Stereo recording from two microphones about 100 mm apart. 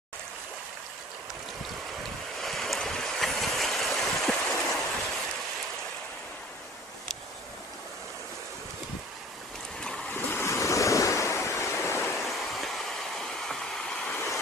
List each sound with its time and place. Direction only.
2.4 s stream: centre (ahead or behind)
9.8 s waves: 5° left (ahead or behind)
10.1 s waves: 25° left (ahead or behind)
12.2 s vehicle: centre (ahead or behind)
14.1 s vehicle: 25° left (ahead or behind)